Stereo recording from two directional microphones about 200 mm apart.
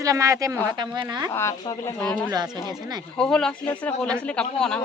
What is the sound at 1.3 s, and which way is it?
Speech, 15° left (ahead or behind).